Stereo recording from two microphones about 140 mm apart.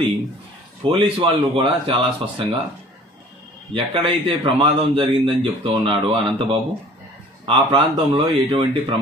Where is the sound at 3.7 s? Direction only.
35° right (ahead or behind).